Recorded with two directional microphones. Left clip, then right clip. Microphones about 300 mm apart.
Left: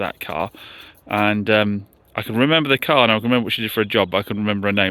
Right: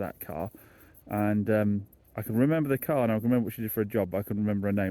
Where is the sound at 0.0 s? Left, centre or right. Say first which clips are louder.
Left 11 dB; centre.